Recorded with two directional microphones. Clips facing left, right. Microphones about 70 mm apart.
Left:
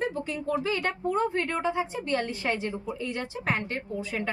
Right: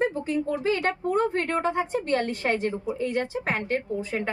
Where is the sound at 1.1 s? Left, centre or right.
Right.